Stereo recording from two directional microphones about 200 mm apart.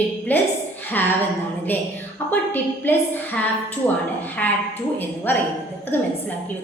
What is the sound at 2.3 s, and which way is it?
A woman's voice, 10° left (ahead or behind).